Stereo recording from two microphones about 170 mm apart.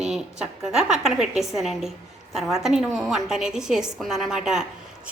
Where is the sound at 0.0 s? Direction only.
5° right (ahead or behind).